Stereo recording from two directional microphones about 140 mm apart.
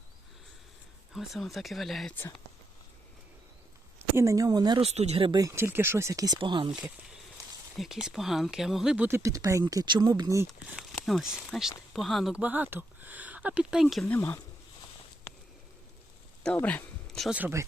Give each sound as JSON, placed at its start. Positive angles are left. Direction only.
{"t": 1.1, "sound": "speech", "side_deg": 0}
{"t": 4.1, "sound": "speech", "side_deg": -20}
{"t": 4.8, "sound": "speech", "side_deg": -50}
{"t": 5.4, "sound": "speech", "side_deg": -20}
{"t": 7.8, "sound": "speech", "side_deg": -5}
{"t": 9.0, "sound": "speech", "side_deg": -20}
{"t": 10.9, "sound": "speech", "side_deg": 0}
{"t": 14.1, "sound": "speech", "side_deg": 15}
{"t": 16.6, "sound": "speech", "side_deg": 10}
{"t": 17.3, "sound": "speech", "side_deg": -15}